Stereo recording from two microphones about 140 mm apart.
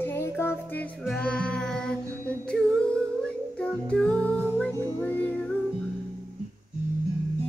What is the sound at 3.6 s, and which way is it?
Music, 5° left (ahead or behind).